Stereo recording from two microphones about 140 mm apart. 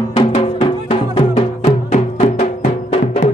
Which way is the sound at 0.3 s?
45° left (ahead or behind).